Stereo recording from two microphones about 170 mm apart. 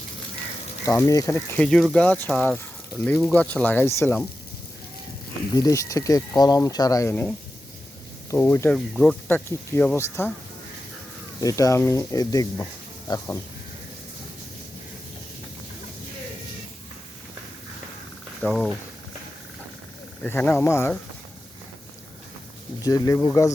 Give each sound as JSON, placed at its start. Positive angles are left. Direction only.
{"t": 0.9, "sound": "speech", "side_deg": 20}
{"t": 5.5, "sound": "speech", "side_deg": 20}
{"t": 11.3, "sound": "speech", "side_deg": 20}
{"t": 18.4, "sound": "speech", "side_deg": 0}
{"t": 20.2, "sound": "speech", "side_deg": 10}
{"t": 22.8, "sound": "speech", "side_deg": 20}